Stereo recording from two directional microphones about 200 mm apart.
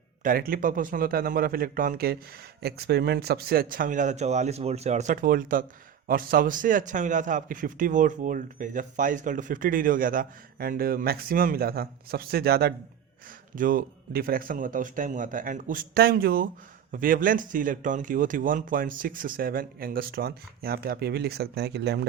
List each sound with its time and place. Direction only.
0.2 s a man's voice: 45° right (ahead or behind)